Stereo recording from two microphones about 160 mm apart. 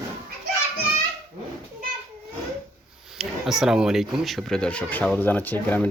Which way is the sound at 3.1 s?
Centre (ahead or behind).